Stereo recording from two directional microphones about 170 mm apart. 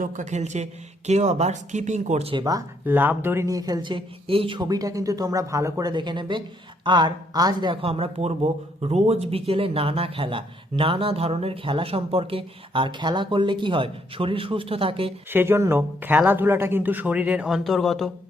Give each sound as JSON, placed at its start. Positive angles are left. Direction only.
{"t": 0.0, "sound": "speech", "side_deg": -50}
{"t": 2.4, "sound": "speech", "side_deg": -20}
{"t": 2.8, "sound": "speech", "side_deg": -10}
{"t": 15.3, "sound": "speech", "side_deg": -15}